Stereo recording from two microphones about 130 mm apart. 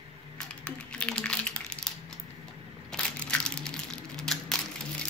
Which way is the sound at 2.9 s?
5° left (ahead or behind).